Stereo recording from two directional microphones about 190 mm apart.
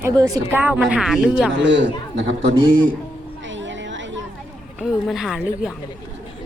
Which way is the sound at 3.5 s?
75° right (ahead or behind).